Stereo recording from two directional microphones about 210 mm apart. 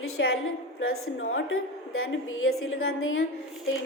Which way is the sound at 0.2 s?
60° left (ahead or behind).